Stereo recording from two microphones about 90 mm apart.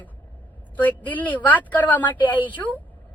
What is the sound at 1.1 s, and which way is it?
Speech, 20° left (ahead or behind).